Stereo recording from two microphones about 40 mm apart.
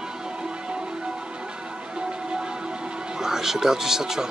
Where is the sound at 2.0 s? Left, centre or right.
Right.